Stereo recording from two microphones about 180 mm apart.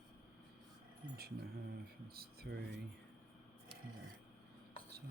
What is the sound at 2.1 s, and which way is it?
Speech, 60° right (ahead or behind).